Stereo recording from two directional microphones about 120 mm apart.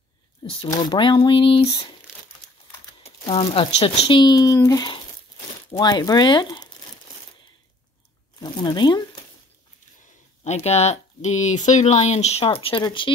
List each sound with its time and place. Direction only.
0.4 s speech: 50° left (ahead or behind)
0.7 s speech: 35° left (ahead or behind)
3.0 s speech: 55° left (ahead or behind)
4.2 s speech: 35° left (ahead or behind)
8.4 s crumpling: 35° left (ahead or behind)
10.4 s speech: 65° left (ahead or behind); by 12.8 s 50° left (ahead or behind)